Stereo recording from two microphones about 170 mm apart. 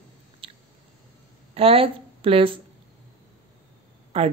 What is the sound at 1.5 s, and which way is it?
Speech, 35° right (ahead or behind).